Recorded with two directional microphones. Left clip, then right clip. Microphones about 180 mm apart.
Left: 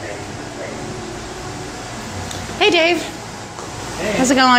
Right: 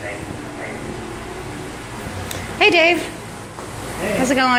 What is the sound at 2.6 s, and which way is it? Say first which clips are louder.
Speech: right 1 dB; 10° left (ahead or behind).